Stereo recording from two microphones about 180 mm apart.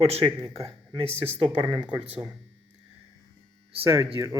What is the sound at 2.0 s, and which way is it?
Speech, 10° right (ahead or behind).